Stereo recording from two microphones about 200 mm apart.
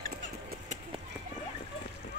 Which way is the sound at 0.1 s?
45° right (ahead or behind).